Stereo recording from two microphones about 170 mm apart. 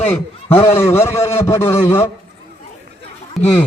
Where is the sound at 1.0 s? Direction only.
15° left (ahead or behind).